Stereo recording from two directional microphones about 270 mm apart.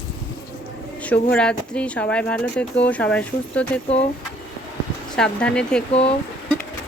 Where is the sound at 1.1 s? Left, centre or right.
Centre.